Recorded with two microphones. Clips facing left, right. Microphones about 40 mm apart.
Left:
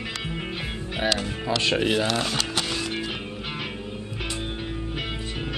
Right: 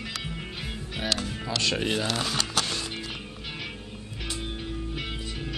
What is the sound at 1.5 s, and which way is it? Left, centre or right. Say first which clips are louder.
Speech: left 5 dB; centre.